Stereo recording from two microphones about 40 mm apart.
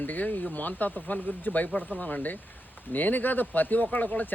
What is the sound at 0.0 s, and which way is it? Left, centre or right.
Speech, left.